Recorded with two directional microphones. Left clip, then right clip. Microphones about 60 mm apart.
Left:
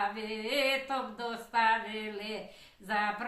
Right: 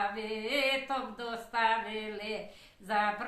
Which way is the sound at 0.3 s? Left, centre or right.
Right.